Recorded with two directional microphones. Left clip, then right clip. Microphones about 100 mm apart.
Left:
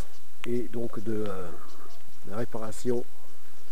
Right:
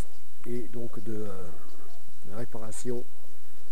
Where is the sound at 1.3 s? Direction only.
Centre (ahead or behind).